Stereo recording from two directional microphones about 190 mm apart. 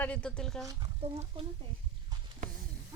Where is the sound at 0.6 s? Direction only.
15° right (ahead or behind).